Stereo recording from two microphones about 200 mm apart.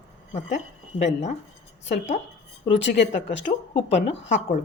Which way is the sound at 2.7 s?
65° left (ahead or behind).